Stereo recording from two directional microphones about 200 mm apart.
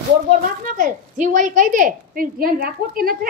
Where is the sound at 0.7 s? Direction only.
40° right (ahead or behind).